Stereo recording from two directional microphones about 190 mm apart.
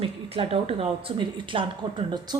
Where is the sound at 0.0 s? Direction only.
30° right (ahead or behind).